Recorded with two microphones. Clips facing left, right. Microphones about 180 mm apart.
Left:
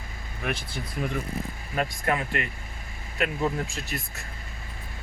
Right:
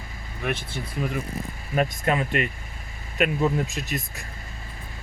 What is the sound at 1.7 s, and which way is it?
Speech, 20° right (ahead or behind).